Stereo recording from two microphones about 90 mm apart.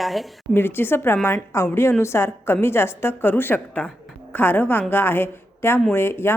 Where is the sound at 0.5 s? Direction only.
25° left (ahead or behind).